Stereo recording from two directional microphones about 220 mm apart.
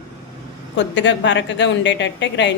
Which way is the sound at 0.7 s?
55° left (ahead or behind).